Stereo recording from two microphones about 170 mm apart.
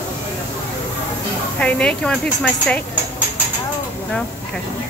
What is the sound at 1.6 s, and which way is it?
Speech, 5° left (ahead or behind).